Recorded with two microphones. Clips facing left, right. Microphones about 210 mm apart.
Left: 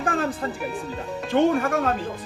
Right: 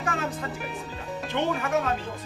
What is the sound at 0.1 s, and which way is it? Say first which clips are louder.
Music: left 5 dB; 35° left (ahead or behind).